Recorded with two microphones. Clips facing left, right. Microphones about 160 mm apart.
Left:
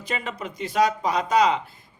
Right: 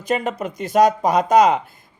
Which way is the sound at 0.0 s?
45° right (ahead or behind).